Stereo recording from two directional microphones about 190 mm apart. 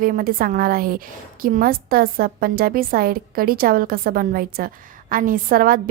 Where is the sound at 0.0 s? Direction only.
45° right (ahead or behind).